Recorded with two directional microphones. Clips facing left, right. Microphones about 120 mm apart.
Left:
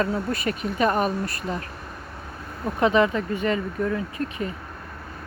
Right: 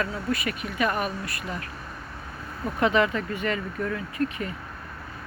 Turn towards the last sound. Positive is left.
turn(degrees=20)  # may be behind; listen again after turning